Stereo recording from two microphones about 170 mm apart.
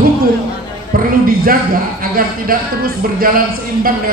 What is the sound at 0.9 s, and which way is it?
A man's voice, 60° right (ahead or behind).